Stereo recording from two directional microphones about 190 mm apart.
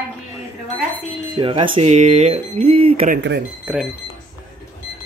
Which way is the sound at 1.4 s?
25° right (ahead or behind).